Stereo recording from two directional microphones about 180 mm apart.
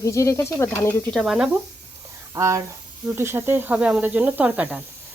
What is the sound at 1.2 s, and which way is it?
Speech, centre (ahead or behind).